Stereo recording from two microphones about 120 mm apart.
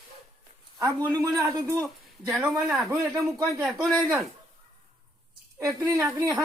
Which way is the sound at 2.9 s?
25° right (ahead or behind).